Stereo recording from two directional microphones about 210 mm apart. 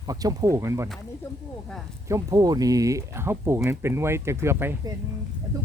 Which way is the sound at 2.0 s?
15° right (ahead or behind).